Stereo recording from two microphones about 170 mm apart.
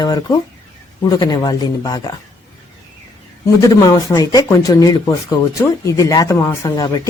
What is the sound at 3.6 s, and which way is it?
Speech, 20° left (ahead or behind).